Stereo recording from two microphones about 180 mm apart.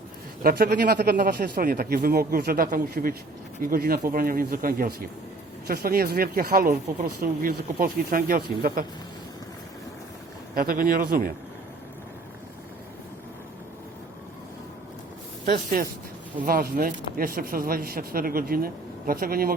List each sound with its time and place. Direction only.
0.4 s speech: 55° right (ahead or behind)
10.5 s speech: 50° right (ahead or behind)
15.5 s speech: 55° right (ahead or behind)